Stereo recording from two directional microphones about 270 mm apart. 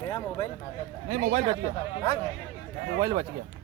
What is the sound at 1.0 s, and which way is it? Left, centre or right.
Speech, right.